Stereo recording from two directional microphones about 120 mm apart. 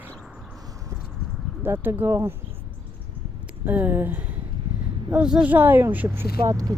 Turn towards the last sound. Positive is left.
turn(degrees=-25)  # may be behind; listen again after turning